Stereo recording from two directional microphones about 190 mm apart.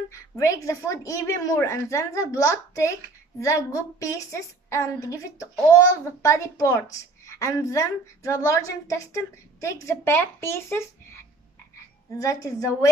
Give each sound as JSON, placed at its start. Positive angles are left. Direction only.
{"t": 0.1, "sound": "a woman's voice", "side_deg": 15}
{"t": 12.2, "sound": "a woman's voice", "side_deg": 15}